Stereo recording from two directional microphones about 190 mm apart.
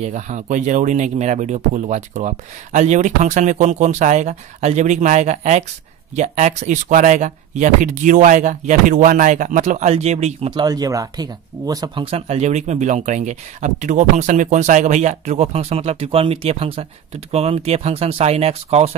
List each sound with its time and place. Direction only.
0.0 s speech: 40° right (ahead or behind)